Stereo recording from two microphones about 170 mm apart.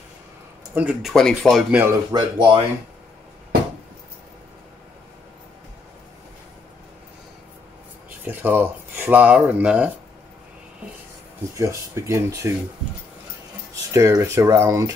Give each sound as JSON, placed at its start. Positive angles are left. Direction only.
{"t": 0.7, "sound": "speech", "side_deg": -10}
{"t": 1.1, "sound": "speech", "side_deg": 5}
{"t": 2.1, "sound": "speech", "side_deg": -30}
{"t": 8.3, "sound": "speech", "side_deg": -10}
{"t": 11.5, "sound": "speech", "side_deg": -20}
{"t": 13.9, "sound": "speech", "side_deg": -20}